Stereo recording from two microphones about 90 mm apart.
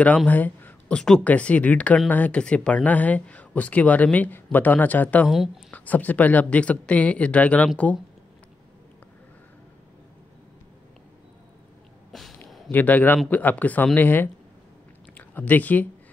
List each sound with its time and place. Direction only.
0.3 s speech: 20° left (ahead or behind)
12.1 s a sound: centre (ahead or behind)
12.7 s a man's voice: 20° left (ahead or behind)